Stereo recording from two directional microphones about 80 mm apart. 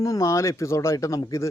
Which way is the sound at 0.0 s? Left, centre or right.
Left.